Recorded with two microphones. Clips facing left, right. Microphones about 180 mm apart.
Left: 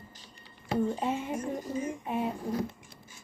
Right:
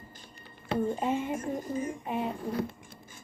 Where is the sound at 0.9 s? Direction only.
Centre (ahead or behind).